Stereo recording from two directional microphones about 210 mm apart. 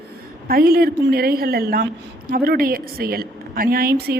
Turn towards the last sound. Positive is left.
turn(degrees=-45)  # may be behind; listen again after turning